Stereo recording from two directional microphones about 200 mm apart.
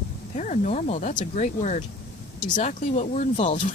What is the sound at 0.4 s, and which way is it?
Speech, 35° left (ahead or behind).